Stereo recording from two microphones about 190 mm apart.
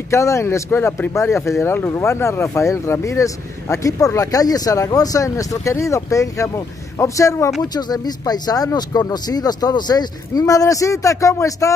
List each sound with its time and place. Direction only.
0.1 s speech: 15° left (ahead or behind)